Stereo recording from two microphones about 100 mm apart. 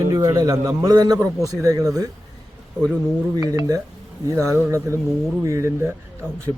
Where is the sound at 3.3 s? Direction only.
35° right (ahead or behind).